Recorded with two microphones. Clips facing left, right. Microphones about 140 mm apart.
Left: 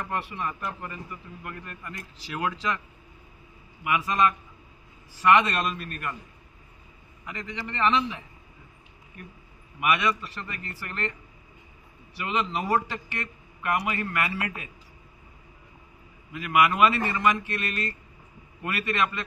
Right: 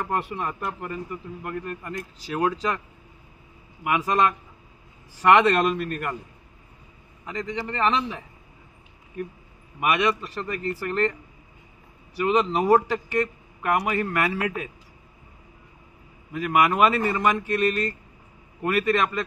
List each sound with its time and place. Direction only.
0.0 s speech: 45° right (ahead or behind)
3.8 s a man's voice: 45° right (ahead or behind)
5.2 s a man's voice: 45° right (ahead or behind)
7.2 s speech: 35° right (ahead or behind)
9.8 s speech: 35° right (ahead or behind)
12.2 s speech: 40° right (ahead or behind)
16.3 s speech: 40° right (ahead or behind)